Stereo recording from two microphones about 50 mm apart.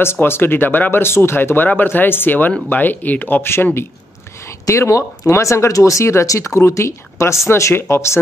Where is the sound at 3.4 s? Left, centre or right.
Left.